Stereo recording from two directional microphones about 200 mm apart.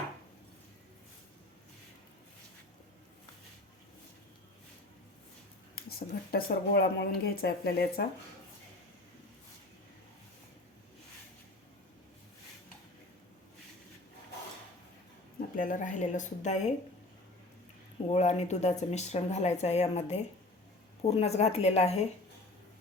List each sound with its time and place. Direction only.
5.7 s speech: 50° left (ahead or behind)
15.4 s a woman's voice: 45° left (ahead or behind)
18.1 s speech: 35° left (ahead or behind)